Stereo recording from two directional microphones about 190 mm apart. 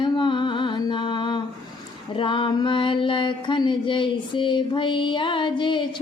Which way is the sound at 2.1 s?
25° left (ahead or behind).